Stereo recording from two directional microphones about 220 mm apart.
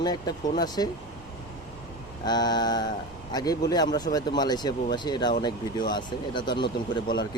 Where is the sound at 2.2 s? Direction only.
20° left (ahead or behind).